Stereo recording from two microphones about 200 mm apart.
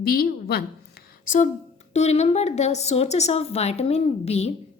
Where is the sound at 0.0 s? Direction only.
50° left (ahead or behind).